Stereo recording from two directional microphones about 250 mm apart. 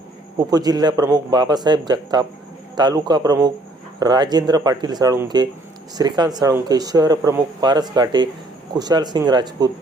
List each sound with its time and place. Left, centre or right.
0.3 s speech: centre